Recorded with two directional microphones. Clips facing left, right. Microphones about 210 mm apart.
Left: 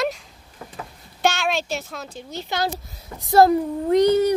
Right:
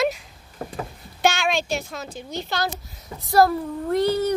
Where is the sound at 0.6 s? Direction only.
45° right (ahead or behind).